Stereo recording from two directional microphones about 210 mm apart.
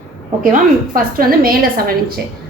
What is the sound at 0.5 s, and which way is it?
A woman's voice, 45° right (ahead or behind).